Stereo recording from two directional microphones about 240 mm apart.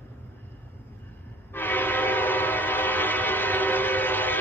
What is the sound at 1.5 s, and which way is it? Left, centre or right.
Train, centre.